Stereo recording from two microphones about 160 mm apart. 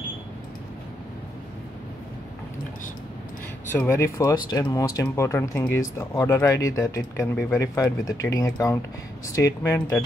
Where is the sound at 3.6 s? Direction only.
15° left (ahead or behind).